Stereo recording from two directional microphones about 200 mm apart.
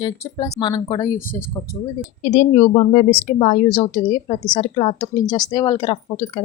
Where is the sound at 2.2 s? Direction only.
40° left (ahead or behind).